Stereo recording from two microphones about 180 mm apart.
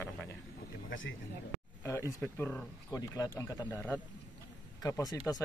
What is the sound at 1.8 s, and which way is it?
Speech, 15° left (ahead or behind).